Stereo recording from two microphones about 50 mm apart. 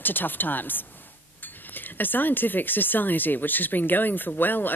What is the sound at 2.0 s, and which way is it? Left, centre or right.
Speech, left.